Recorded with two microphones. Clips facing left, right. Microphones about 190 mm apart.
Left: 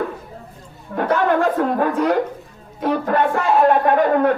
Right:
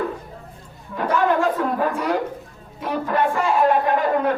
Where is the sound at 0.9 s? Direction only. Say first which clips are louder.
Left 2 dB; 55° left (ahead or behind).